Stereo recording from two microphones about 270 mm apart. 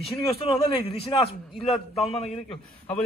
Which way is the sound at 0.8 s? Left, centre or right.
Left.